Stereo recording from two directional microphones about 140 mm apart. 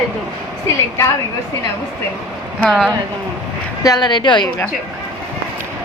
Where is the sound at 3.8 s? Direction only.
30° left (ahead or behind).